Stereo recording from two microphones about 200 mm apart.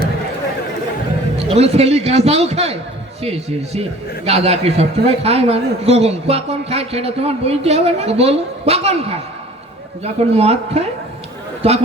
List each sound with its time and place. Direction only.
1.4 s a man's voice: 30° right (ahead or behind)